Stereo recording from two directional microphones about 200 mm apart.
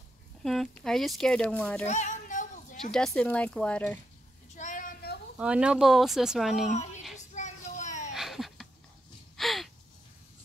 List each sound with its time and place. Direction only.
0.4 s speech: centre (ahead or behind)
1.9 s female singing: 35° left (ahead or behind)
2.8 s speech: centre (ahead or behind)
4.6 s child singing: 40° left (ahead or behind)
5.4 s speech: 5° right (ahead or behind)
7.3 s a sound: 35° left (ahead or behind)
8.1 s a sound: centre (ahead or behind)
9.4 s gasp: centre (ahead or behind)